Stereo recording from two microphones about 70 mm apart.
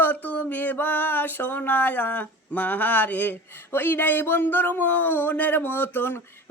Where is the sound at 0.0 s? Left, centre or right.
Left.